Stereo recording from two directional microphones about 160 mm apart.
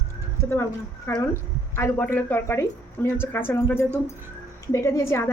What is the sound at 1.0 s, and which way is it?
A woman's voice, 15° left (ahead or behind).